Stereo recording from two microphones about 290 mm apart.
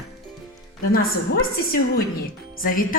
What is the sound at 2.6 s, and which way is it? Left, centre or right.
Speech, left.